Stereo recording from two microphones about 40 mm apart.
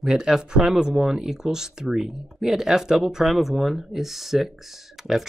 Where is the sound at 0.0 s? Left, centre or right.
Centre.